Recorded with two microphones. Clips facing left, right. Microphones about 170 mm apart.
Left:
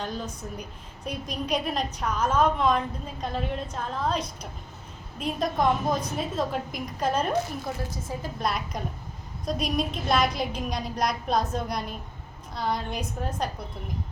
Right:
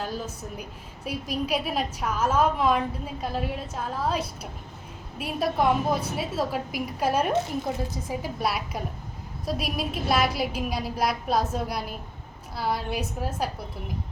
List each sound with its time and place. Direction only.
0.0 s a woman's voice: 5° right (ahead or behind)